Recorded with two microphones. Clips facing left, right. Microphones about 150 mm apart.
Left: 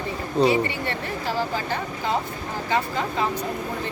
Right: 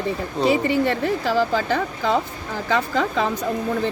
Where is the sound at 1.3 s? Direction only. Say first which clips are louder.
Right 4 dB; 90° right.